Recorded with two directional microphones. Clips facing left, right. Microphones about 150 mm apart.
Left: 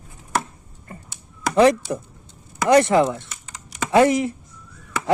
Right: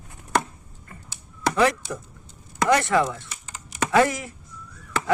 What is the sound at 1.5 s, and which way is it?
Speech, 20° left (ahead or behind).